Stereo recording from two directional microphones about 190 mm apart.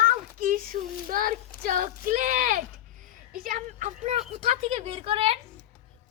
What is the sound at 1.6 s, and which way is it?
Speech, 45° right (ahead or behind).